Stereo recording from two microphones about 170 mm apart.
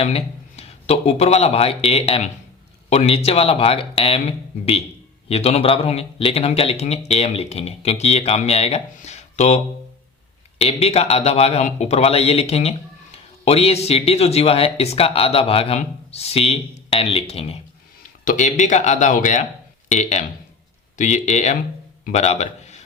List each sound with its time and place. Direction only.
0.0 s speech: 35° left (ahead or behind)
10.6 s speech: 35° left (ahead or behind)
18.3 s a man's voice: 45° left (ahead or behind)